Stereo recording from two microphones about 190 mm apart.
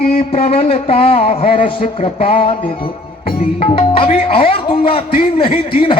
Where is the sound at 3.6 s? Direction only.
30° left (ahead or behind).